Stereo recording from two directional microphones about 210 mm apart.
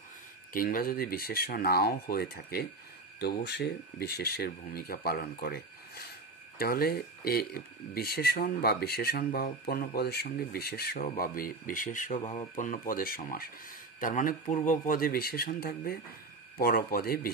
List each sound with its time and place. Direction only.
0.5 s speech: 40° left (ahead or behind)
12.2 s speech: 25° left (ahead or behind)
12.5 s speech: 40° left (ahead or behind)